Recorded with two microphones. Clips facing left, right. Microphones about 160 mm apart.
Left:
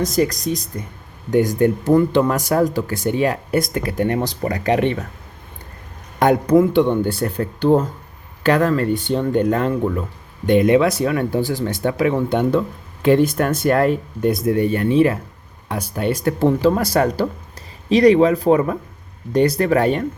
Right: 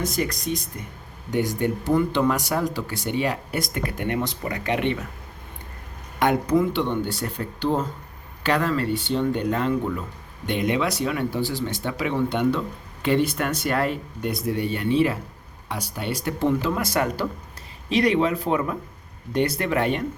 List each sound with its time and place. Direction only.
0.0 s speech: 40° left (ahead or behind)
6.1 s speech: 40° left (ahead or behind)